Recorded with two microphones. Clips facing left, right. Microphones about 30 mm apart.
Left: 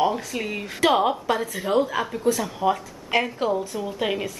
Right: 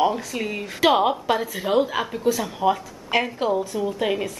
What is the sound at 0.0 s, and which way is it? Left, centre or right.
Speech, centre.